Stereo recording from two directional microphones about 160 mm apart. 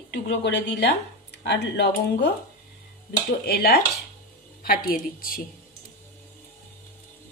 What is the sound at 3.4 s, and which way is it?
Speech, 75° left (ahead or behind).